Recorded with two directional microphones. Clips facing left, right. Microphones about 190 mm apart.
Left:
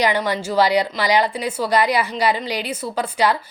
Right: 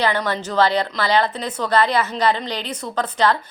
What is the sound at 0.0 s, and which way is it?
Speech, 15° left (ahead or behind).